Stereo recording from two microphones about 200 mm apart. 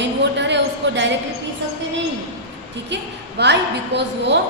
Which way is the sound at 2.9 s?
60° right (ahead or behind).